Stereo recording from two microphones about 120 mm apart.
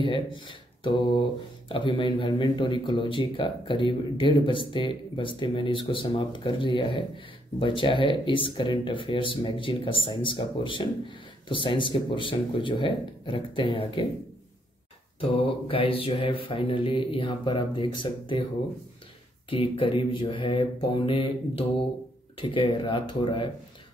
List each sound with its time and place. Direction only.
0.0 s speech: 45° left (ahead or behind)
15.1 s speech: 50° left (ahead or behind)
19.5 s speech: 50° left (ahead or behind)